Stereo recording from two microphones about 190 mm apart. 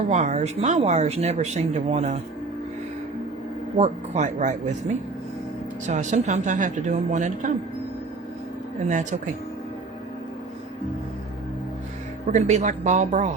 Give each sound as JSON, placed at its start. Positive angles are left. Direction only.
{"t": 0.1, "sound": "speech", "side_deg": -35}
{"t": 3.8, "sound": "speech", "side_deg": -35}
{"t": 5.9, "sound": "speech", "side_deg": -40}
{"t": 8.9, "sound": "speech", "side_deg": -40}
{"t": 12.3, "sound": "speech", "side_deg": -35}